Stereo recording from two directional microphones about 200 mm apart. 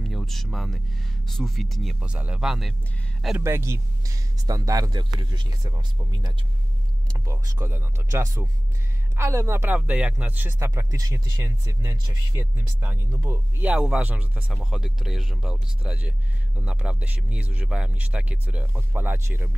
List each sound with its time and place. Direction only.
0.0 s speech: centre (ahead or behind)
3.4 s speech: 10° right (ahead or behind)